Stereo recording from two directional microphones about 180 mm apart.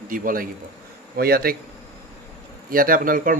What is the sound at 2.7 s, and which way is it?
Speech, 50° right (ahead or behind).